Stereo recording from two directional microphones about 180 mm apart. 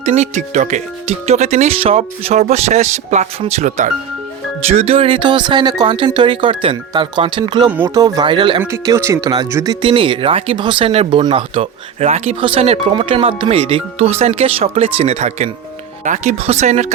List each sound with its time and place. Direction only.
0.0 s speech: 40° right (ahead or behind)
8.6 s speech: 20° right (ahead or behind)
9.8 s speech: 30° right (ahead or behind)